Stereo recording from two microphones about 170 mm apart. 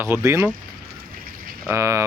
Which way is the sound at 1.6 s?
15° right (ahead or behind).